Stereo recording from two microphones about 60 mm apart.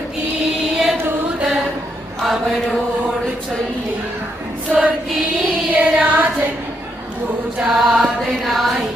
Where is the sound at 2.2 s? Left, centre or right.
Centre.